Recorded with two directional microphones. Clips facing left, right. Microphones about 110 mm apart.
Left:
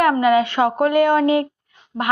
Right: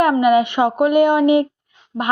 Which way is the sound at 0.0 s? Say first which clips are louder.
Right 2 dB; 20° right (ahead or behind).